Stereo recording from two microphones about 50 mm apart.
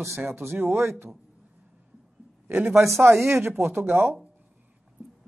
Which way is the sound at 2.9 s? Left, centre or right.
Right.